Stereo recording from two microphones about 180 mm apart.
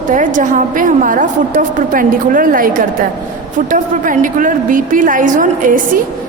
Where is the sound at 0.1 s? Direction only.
45° right (ahead or behind).